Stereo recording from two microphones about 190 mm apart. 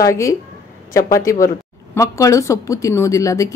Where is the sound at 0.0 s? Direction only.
15° left (ahead or behind).